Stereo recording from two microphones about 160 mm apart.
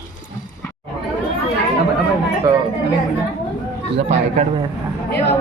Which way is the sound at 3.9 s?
40° right (ahead or behind).